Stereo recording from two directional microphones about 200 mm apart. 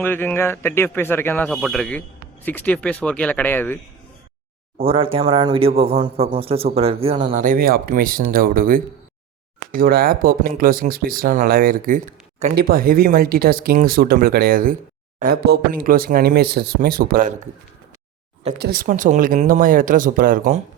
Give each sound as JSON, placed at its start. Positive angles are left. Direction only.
{"t": 0.0, "sound": "a man's voice", "side_deg": 10}
{"t": 4.9, "sound": "speech", "side_deg": -25}
{"t": 18.6, "sound": "speech", "side_deg": -50}